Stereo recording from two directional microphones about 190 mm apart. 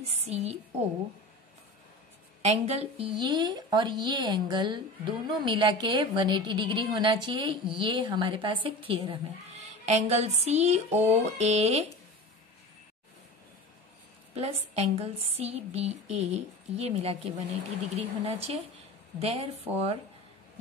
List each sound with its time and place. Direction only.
0.0 s a woman's voice: 35° right (ahead or behind)
2.4 s a woman's voice: 30° right (ahead or behind)
14.3 s speech: 30° right (ahead or behind)